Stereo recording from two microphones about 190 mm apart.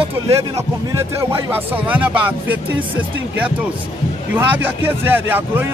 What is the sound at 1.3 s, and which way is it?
Speech, 10° right (ahead or behind).